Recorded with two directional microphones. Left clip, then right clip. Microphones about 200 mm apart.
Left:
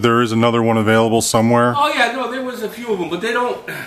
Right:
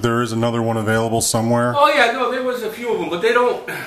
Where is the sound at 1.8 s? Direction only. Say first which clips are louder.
Right 2 dB; centre (ahead or behind).